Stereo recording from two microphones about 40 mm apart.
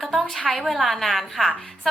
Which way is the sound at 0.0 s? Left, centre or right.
Centre.